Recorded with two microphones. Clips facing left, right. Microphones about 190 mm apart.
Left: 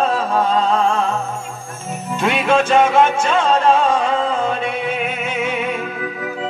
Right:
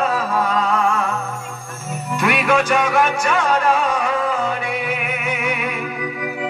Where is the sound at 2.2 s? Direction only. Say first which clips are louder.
Left 2 dB; 25° left (ahead or behind).